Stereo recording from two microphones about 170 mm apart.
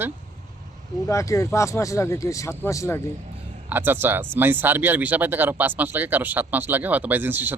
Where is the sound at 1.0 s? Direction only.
20° left (ahead or behind).